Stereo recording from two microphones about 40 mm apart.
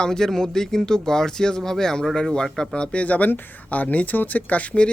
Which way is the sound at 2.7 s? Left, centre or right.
Left.